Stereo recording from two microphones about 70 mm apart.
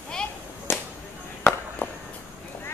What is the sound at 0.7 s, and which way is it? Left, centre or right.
Whip, left.